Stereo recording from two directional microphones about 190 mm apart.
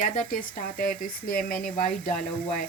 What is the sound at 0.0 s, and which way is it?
Speech, 45° left (ahead or behind).